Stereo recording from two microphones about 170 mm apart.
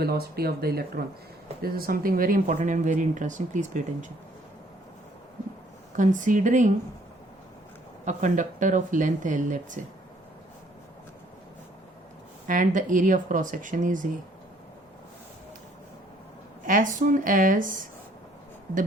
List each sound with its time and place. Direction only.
0.0 s speech: 65° right (ahead or behind); by 3.8 s 45° right (ahead or behind)
6.0 s speech: 50° right (ahead or behind)
8.0 s speech: 45° right (ahead or behind)
12.5 s speech: 50° right (ahead or behind)
16.6 s speech: 50° right (ahead or behind)